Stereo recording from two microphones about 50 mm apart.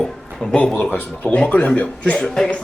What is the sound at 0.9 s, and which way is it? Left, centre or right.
Speech, left.